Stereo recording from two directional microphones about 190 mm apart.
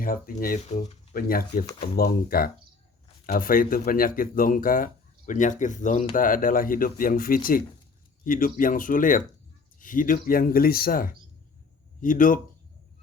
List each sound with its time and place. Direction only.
0.0 s speech: 50° left (ahead or behind)